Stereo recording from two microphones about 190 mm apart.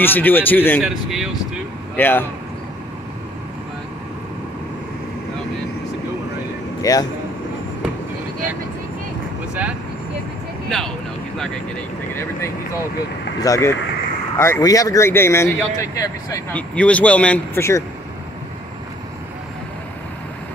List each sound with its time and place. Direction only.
0.0 s speech: 10° left (ahead or behind)
0.8 s speech: 5° right (ahead or behind)
2.0 s speech: 10° left (ahead or behind)
6.8 s speech: 20° left (ahead or behind)
13.4 s speech: 15° left (ahead or behind)